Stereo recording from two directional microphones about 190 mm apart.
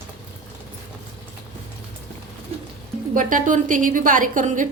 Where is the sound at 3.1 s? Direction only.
45° right (ahead or behind).